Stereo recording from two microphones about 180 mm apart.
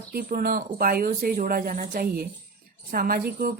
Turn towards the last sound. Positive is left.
turn(degrees=-55)  # may be behind; listen again after turning